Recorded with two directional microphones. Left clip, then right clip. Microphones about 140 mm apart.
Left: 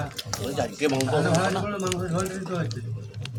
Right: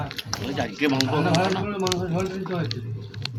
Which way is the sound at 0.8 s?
25° left (ahead or behind).